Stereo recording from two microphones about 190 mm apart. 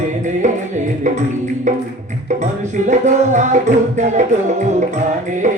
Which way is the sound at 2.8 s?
40° right (ahead or behind).